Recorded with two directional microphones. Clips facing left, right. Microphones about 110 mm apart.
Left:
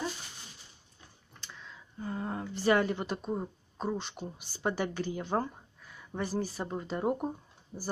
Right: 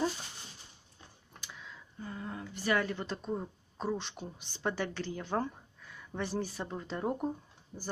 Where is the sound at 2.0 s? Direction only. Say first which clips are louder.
Left 6 dB; 40° left (ahead or behind).